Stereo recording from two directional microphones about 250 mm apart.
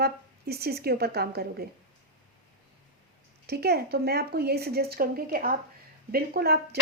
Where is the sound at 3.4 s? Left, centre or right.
Right.